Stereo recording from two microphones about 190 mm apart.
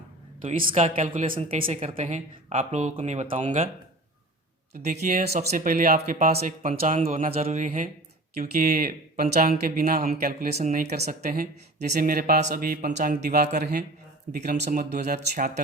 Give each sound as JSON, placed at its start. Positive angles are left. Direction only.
{"t": 0.6, "sound": "speech", "side_deg": -30}
{"t": 4.9, "sound": "speech", "side_deg": -35}
{"t": 8.4, "sound": "speech", "side_deg": -50}